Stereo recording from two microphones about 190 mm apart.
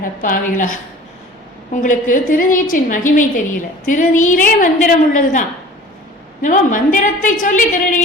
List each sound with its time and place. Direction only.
0.0 s a woman's voice: 45° left (ahead or behind)